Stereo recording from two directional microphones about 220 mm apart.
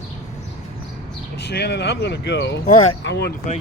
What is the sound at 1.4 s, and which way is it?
Speech, 50° left (ahead or behind).